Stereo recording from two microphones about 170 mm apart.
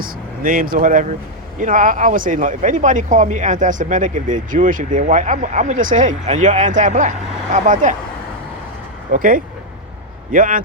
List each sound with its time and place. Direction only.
0.0 s speech: 55° right (ahead or behind)
9.1 s speech: 55° right (ahead or behind)